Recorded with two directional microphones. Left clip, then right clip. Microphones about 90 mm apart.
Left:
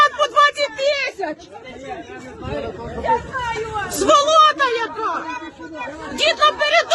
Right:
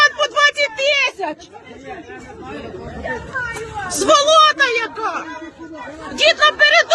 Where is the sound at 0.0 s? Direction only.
20° left (ahead or behind).